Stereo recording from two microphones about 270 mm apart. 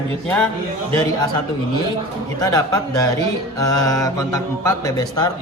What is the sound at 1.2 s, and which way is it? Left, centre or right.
Mantra, centre.